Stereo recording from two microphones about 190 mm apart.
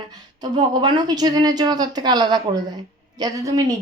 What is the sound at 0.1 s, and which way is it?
Speech, 20° right (ahead or behind).